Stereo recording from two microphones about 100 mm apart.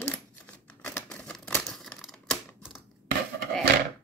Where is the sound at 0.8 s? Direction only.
15° left (ahead or behind).